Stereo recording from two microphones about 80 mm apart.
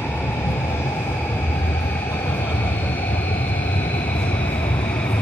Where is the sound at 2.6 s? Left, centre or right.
Left.